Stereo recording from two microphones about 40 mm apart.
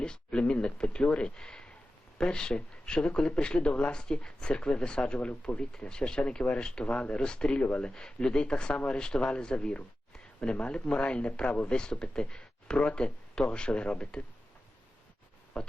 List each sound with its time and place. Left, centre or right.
0.0 s speech: left
6.8 s speech: left
7.9 s speech: centre
11.5 s speech: left
11.8 s speech: left
15.6 s speech: left